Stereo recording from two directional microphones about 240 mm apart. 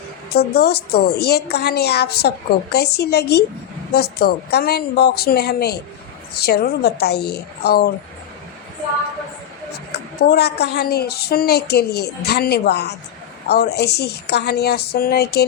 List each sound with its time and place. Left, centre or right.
0.3 s a woman's voice: left
10.2 s a woman's voice: left